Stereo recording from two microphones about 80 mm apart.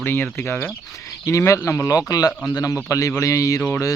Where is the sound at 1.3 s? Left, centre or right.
Left.